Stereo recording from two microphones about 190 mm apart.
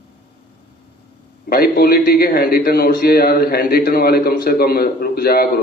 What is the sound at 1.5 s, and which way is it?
A man's voice, 50° left (ahead or behind).